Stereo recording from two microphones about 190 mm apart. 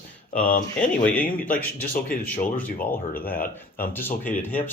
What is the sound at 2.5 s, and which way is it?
Speech, 10° left (ahead or behind).